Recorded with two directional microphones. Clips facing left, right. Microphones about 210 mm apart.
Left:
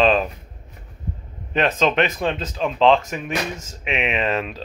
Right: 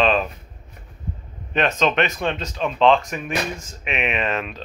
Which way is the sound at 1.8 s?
10° left (ahead or behind).